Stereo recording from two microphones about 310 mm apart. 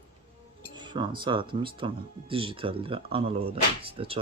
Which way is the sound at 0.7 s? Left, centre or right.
Centre.